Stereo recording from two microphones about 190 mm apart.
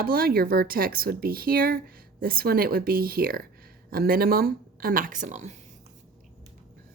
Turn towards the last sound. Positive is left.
turn(degrees=-40)  # may be behind; listen again after turning